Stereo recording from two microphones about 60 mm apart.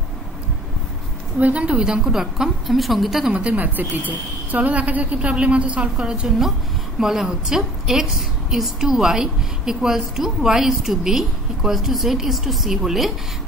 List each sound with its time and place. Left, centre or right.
1.4 s a woman's voice: right; by 3.3 s centre
3.5 s a woman's voice: right; by 13.1 s centre